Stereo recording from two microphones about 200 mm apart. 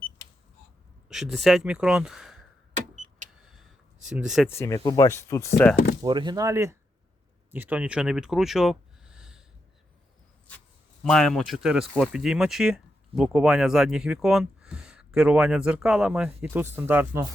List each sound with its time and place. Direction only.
1.1 s speech: centre (ahead or behind)
3.4 s a sound: centre (ahead or behind)
4.1 s speech: 5° right (ahead or behind)
4.4 s speech: 15° left (ahead or behind)
6.0 s speech: 20° right (ahead or behind); by 9.4 s 5° right (ahead or behind)
11.0 s speech: 5° left (ahead or behind)